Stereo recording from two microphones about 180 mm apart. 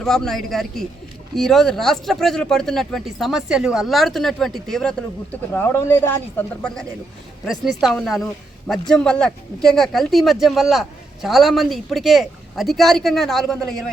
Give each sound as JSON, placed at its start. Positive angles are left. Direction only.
{"t": 0.0, "sound": "speech", "side_deg": 0}